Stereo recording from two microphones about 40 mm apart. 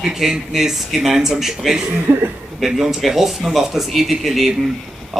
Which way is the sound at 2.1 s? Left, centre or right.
Right.